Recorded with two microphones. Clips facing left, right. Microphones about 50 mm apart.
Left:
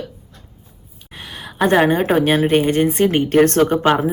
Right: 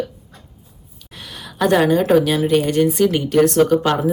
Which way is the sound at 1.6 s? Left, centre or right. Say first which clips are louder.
Even; left.